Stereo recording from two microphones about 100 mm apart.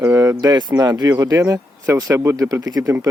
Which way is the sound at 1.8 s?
30° right (ahead or behind).